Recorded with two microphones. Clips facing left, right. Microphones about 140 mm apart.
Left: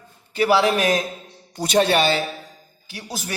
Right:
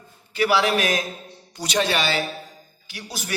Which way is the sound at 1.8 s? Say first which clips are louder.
Left 4 dB; 30° left (ahead or behind).